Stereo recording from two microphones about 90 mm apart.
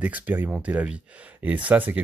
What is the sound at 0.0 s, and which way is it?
Speech, 20° right (ahead or behind).